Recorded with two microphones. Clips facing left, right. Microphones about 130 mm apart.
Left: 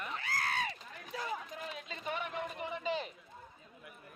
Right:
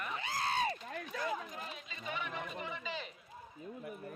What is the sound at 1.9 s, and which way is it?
A man's voice, 50° left (ahead or behind).